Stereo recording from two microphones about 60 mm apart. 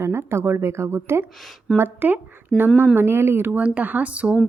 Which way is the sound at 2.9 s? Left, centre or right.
Right.